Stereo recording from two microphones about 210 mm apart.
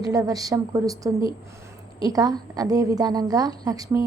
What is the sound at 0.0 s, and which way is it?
A woman's voice, 15° right (ahead or behind).